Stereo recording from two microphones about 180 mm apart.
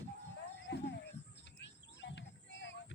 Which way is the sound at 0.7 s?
70° left (ahead or behind).